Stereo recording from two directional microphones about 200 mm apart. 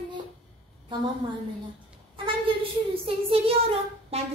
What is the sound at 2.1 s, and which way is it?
A woman's voice, 25° right (ahead or behind).